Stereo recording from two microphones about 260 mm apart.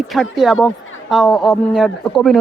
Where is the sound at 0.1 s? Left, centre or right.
Centre.